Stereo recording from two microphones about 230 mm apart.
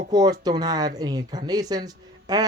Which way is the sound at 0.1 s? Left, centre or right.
Centre.